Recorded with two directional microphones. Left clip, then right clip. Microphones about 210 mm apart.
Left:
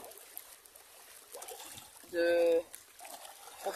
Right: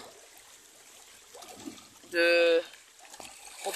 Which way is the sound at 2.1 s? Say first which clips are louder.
Right 5 dB; 15° right (ahead or behind).